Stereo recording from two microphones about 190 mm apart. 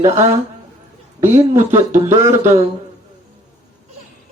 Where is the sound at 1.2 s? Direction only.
15° right (ahead or behind).